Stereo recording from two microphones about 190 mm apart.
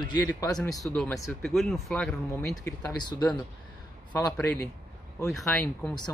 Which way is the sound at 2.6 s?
20° left (ahead or behind).